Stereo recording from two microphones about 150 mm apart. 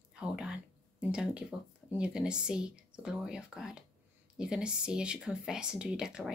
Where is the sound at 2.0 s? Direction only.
5° right (ahead or behind).